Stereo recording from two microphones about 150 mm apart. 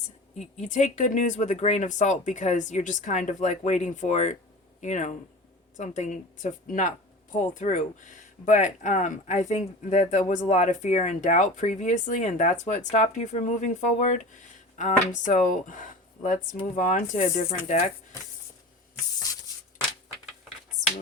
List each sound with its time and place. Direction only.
0.3 s speech: 50° left (ahead or behind)